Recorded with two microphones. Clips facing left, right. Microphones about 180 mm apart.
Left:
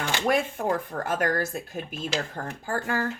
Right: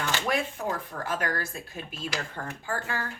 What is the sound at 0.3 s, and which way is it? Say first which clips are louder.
Speech: left 7 dB; 50° left (ahead or behind).